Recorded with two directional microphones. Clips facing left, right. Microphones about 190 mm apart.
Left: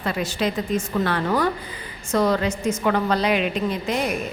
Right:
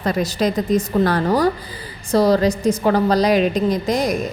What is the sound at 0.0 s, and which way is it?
A woman's voice, 40° right (ahead or behind).